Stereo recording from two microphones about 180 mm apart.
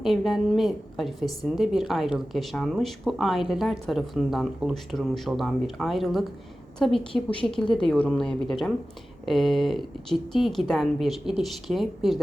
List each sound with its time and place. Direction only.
0.0 s a woman's voice: centre (ahead or behind)